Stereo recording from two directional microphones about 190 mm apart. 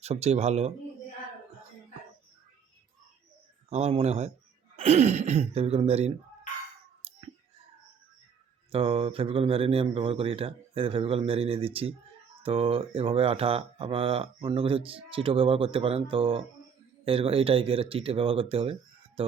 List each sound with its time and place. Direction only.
0.0 s speech: 35° right (ahead or behind)
3.7 s speech: 35° right (ahead or behind)
7.0 s a sound: 30° right (ahead or behind)
8.7 s speech: 30° right (ahead or behind)